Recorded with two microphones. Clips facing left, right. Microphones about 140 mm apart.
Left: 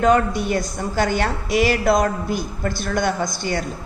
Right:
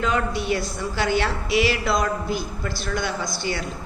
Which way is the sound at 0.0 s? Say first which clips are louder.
Left 7 dB; 45° left (ahead or behind).